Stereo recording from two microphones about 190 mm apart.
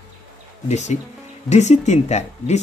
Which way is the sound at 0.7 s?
35° left (ahead or behind).